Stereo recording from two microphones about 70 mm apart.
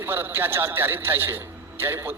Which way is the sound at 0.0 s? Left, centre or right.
Right.